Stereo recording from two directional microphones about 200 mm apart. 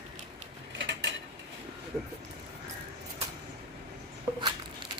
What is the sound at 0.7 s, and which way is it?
Mechanisms, 60° right (ahead or behind).